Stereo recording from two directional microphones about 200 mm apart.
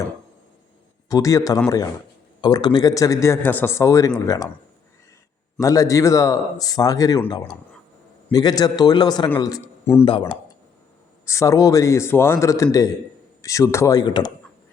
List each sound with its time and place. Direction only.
1.0 s a man's voice: 15° left (ahead or behind)
5.5 s a man's voice: 15° left (ahead or behind)